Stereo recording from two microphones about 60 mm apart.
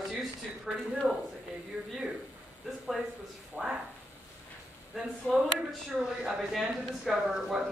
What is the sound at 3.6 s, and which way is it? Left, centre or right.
Speech, centre.